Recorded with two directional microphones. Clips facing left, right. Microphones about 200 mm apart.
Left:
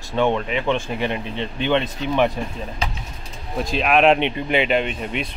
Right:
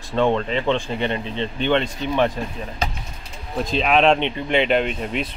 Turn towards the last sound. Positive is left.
turn(degrees=5)  # may be behind; listen again after turning